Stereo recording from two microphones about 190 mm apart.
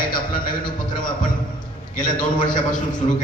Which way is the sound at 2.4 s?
45° left (ahead or behind).